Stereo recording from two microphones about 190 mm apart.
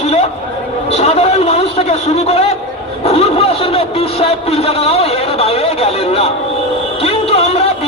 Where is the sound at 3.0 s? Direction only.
30° left (ahead or behind).